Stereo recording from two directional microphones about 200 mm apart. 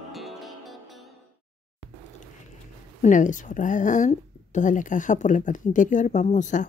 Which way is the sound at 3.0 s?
40° left (ahead or behind).